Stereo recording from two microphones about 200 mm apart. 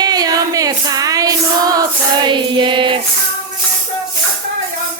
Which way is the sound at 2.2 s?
25° right (ahead or behind).